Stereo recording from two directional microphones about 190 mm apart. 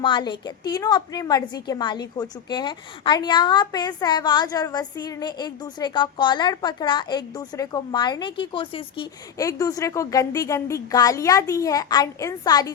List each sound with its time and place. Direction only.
0.0 s a woman's voice: 25° left (ahead or behind)